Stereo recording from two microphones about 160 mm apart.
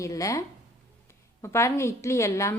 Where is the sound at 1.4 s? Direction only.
15° left (ahead or behind).